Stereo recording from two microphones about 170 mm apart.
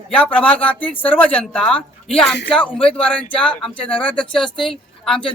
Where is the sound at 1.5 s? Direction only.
5° left (ahead or behind).